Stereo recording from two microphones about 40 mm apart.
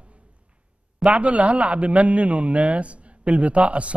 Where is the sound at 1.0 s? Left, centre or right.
Right.